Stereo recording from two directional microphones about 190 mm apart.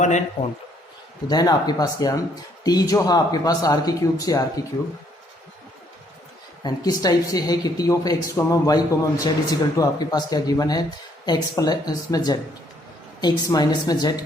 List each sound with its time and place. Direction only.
1.3 s speech: 20° left (ahead or behind)
6.6 s speech: 20° left (ahead or behind)